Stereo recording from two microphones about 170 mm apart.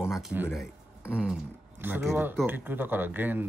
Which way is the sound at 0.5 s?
5° right (ahead or behind).